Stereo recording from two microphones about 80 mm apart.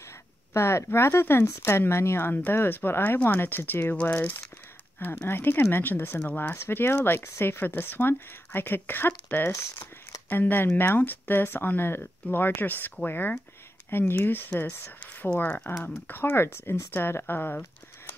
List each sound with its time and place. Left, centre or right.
0.5 s speech: left
6.5 s speech: left
9.5 s speech: left
10.3 s speech: left